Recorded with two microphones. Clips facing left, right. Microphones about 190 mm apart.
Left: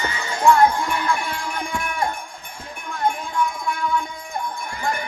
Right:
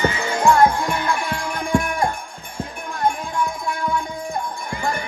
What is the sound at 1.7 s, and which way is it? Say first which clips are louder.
Wind chime: right 6 dB; 40° right (ahead or behind).